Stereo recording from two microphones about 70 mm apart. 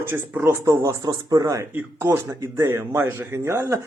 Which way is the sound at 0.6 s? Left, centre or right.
Right.